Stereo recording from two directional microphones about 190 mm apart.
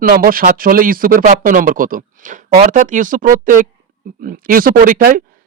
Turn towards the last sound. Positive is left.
turn(degrees=-45)  # may be behind; listen again after turning